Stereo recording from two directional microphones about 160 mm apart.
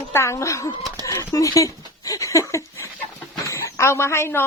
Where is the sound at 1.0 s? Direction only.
20° left (ahead or behind).